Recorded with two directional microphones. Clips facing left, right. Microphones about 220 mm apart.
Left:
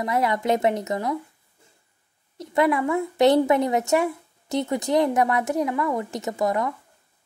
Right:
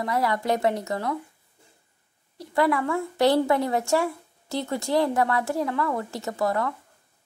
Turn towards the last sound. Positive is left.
turn(degrees=15)  # may be behind; listen again after turning